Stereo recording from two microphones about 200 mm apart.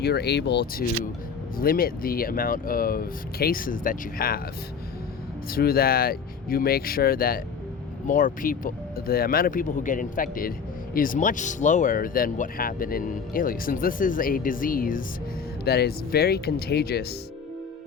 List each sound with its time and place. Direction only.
0.0 s speech: 55° left (ahead or behind)
5.5 s speech: 50° left (ahead or behind)